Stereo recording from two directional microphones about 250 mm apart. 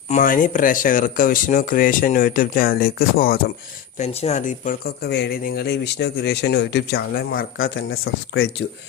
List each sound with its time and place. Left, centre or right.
0.1 s speech: left
3.9 s speech: left